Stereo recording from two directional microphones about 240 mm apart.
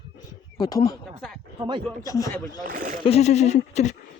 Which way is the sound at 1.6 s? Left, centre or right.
Centre.